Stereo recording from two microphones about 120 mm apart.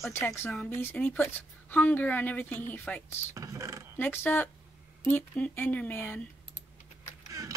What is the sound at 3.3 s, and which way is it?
Speech, 25° right (ahead or behind).